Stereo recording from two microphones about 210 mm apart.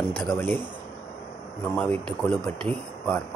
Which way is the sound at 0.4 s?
10° left (ahead or behind).